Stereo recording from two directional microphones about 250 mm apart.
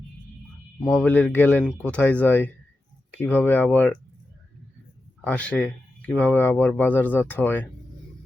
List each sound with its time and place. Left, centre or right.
0.8 s speech: centre
5.2 s speech: centre